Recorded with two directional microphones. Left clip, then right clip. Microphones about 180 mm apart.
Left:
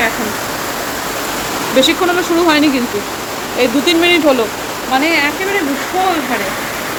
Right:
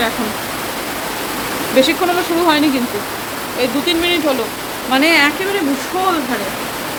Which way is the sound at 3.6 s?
25° left (ahead or behind).